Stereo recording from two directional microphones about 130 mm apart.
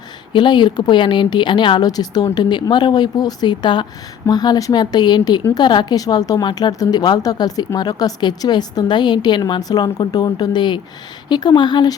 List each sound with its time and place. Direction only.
0.3 s a woman's voice: 35° left (ahead or behind)